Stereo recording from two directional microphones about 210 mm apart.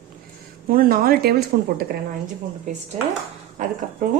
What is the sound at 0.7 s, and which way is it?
Speech, 45° right (ahead or behind).